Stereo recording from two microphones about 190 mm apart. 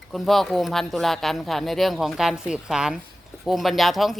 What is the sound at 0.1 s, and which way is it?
A woman's voice, centre (ahead or behind).